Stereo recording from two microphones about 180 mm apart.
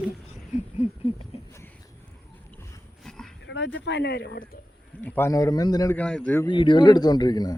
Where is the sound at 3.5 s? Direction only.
85° left; by 4.6 s 65° left (ahead or behind).